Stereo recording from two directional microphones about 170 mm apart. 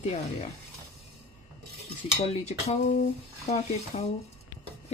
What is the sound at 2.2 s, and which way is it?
Speech, 40° left (ahead or behind).